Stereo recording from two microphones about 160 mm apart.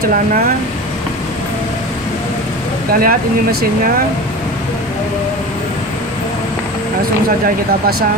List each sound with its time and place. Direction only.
2.9 s speech: 65° right (ahead or behind)